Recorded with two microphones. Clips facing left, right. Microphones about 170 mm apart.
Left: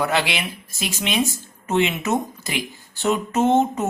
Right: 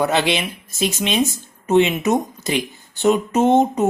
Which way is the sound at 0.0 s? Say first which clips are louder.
Right 4 dB; 20° right (ahead or behind).